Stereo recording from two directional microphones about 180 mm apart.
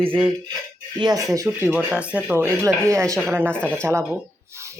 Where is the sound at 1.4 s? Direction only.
10° right (ahead or behind).